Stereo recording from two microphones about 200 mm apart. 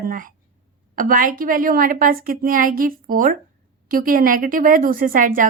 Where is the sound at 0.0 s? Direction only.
45° right (ahead or behind).